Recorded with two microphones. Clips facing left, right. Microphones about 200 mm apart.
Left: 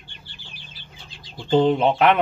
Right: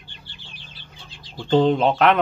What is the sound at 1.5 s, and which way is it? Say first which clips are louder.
Speech: even; 5° left (ahead or behind).